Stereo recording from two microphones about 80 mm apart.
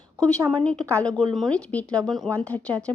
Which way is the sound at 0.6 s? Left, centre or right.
Centre.